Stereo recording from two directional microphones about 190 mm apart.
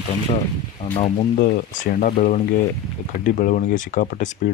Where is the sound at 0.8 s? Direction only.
30° left (ahead or behind).